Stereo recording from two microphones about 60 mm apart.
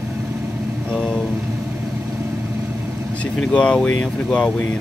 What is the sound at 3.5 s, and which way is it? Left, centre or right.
Speech, centre.